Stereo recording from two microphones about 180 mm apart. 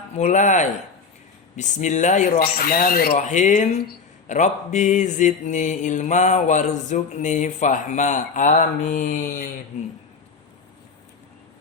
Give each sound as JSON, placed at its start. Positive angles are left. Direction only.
{"t": 0.2, "sound": "mantra", "side_deg": 45}
{"t": 3.2, "sound": "mantra", "side_deg": 40}